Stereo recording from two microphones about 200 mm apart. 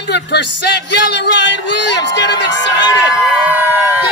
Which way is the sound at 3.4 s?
10° right (ahead or behind).